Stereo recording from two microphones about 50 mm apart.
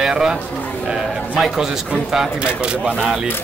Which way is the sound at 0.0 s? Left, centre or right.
Centre.